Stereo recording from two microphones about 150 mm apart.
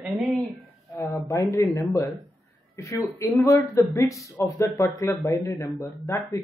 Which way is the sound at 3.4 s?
20° left (ahead or behind).